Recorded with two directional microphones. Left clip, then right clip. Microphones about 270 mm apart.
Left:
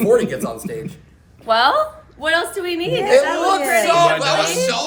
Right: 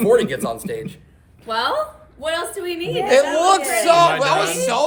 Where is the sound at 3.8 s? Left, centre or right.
Right.